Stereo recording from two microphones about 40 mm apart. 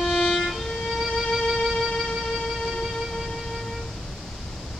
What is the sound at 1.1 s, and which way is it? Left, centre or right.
Music, centre.